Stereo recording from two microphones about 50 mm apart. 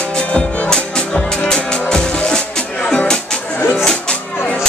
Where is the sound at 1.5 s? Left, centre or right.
Centre.